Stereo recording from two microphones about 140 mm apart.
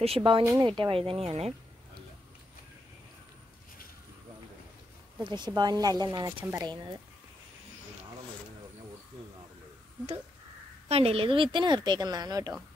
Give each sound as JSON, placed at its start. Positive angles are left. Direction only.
{"t": 0.0, "sound": "a woman's voice", "side_deg": -40}
{"t": 5.2, "sound": "speech", "side_deg": -35}
{"t": 10.9, "sound": "a woman's voice", "side_deg": -45}